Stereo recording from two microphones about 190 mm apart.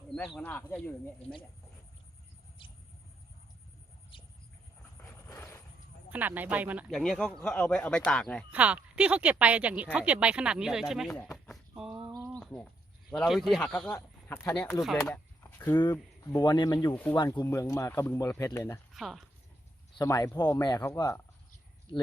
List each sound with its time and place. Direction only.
0.1 s speech: centre (ahead or behind)
2.6 s a sound: 25° left (ahead or behind)
4.1 s a sound: 25° left (ahead or behind)
5.0 s vehicle: 15° left (ahead or behind)
6.1 s speech: 10° right (ahead or behind)
8.4 s speech: 5° right (ahead or behind)
11.3 s a sound: centre (ahead or behind)
12.3 s bird: 5° left (ahead or behind)
13.1 s speech: centre (ahead or behind); by 16.9 s 20° left (ahead or behind)
16.9 s speech: 10° left (ahead or behind)
17.2 s speech: 20° left (ahead or behind)
18.9 s speech: centre (ahead or behind)
20.0 s speech: 15° left (ahead or behind)